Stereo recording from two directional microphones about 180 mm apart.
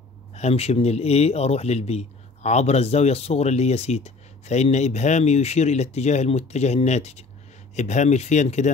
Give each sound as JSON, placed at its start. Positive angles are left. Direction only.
{"t": 0.3, "sound": "speech", "side_deg": 35}